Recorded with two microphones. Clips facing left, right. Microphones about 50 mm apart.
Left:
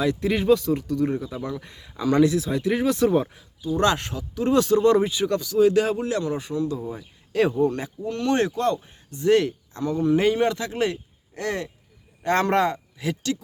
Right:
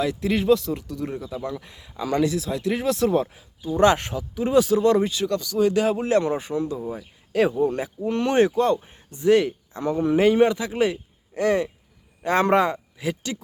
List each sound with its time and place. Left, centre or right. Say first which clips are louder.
0.0 s speech: even; centre
3.6 s speech: right 3 dB; right; by 6.0 s centre
6.0 s speech: right 4 dB; right
6.4 s speech: even; right; by 7.7 s centre
8.0 s speech: right 3 dB; right
9.2 s speech: right 1 dB; centre
9.8 s speech: even; right
10.3 s a man's voice: right 4 dB; centre